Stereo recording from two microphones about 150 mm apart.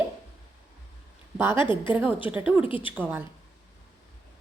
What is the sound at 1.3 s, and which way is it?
Speech, 15° right (ahead or behind).